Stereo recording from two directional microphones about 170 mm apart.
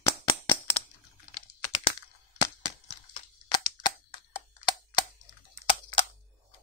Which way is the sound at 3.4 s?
25° left (ahead or behind).